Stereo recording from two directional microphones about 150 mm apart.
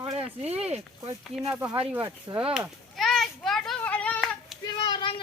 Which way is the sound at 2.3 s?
20° right (ahead or behind).